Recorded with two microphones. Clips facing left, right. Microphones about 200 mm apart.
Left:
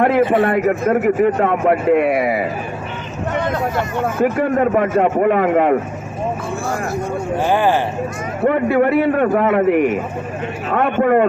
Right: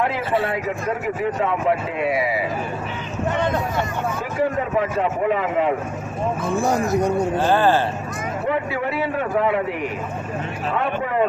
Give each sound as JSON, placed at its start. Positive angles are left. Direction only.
{"t": 0.3, "sound": "a man's voice", "side_deg": 60}
{"t": 4.2, "sound": "a man's voice", "side_deg": 60}
{"t": 6.6, "sound": "speech", "side_deg": -20}
{"t": 7.3, "sound": "speech", "side_deg": 15}
{"t": 8.4, "sound": "a man's voice", "side_deg": 55}